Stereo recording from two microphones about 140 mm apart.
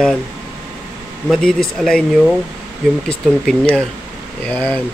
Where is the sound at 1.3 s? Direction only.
5° left (ahead or behind).